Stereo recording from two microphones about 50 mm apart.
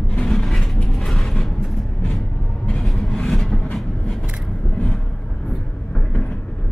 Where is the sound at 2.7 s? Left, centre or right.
Centre.